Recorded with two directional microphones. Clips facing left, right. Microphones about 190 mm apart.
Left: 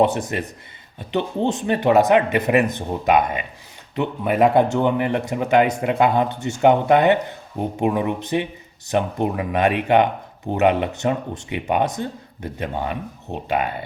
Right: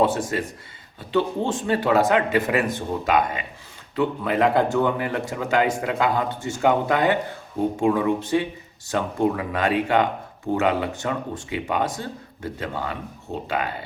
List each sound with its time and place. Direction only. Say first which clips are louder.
0.0 s a man's voice: left 2 dB; 20° left (ahead or behind)